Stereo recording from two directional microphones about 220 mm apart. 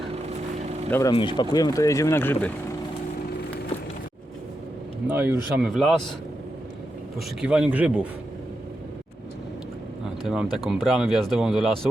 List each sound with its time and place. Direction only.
0.9 s speech: 15° left (ahead or behind)
5.0 s speech: 10° right (ahead or behind)
7.4 s speech: 5° right (ahead or behind)
10.2 s speech: centre (ahead or behind)